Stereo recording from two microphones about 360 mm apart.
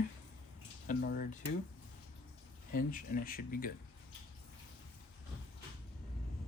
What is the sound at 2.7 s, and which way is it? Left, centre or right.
Speech, left.